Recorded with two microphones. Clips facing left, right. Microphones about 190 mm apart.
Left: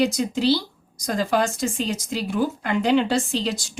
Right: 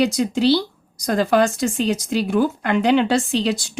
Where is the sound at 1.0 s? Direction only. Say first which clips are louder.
Right 5 dB; 65° right (ahead or behind).